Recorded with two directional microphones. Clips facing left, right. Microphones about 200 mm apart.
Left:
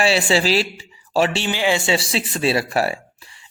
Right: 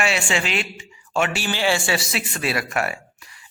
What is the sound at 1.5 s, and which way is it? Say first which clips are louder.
Speech: left 2 dB; 15° left (ahead or behind).